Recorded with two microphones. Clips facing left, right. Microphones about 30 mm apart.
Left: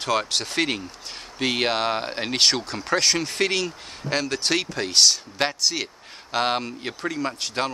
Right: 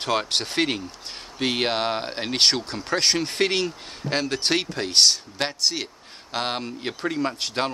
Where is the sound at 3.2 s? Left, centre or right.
Centre.